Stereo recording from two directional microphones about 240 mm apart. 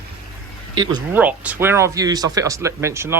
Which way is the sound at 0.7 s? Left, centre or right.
Centre.